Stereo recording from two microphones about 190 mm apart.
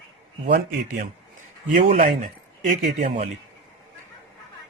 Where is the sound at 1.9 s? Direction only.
35° right (ahead or behind).